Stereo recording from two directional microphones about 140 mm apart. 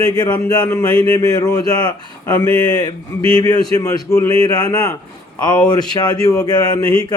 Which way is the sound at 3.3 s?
30° left (ahead or behind).